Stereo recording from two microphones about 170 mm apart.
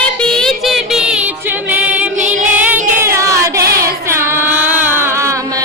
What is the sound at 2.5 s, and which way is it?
Music, 10° right (ahead or behind).